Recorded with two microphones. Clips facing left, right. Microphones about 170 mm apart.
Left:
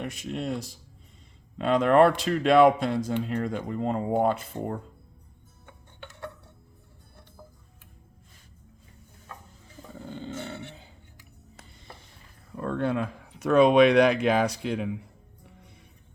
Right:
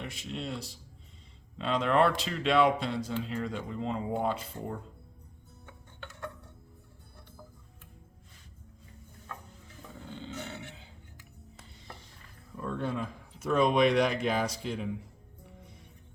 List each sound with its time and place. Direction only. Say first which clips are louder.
0.0 s speech: left 6 dB; 50° left (ahead or behind)
10.1 s roar: left 5 dB; 50° left (ahead or behind)
12.5 s speech: left 6 dB; 65° left (ahead or behind)